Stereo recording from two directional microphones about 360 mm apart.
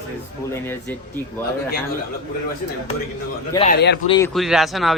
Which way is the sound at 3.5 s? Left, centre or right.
Centre.